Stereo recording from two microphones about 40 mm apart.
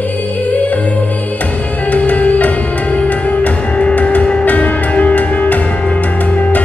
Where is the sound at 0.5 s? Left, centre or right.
Left.